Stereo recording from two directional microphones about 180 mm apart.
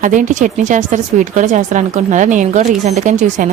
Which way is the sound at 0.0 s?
45° right (ahead or behind).